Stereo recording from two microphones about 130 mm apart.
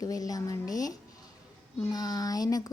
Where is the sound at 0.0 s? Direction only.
30° left (ahead or behind).